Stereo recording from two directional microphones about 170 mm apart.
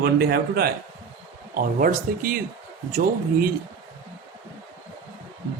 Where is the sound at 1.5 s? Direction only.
55° right (ahead or behind).